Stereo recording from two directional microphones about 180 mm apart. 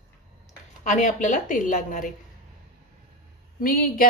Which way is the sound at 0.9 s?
45° left (ahead or behind).